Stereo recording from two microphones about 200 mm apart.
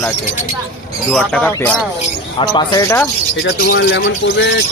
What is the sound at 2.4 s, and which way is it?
Speech, 20° left (ahead or behind).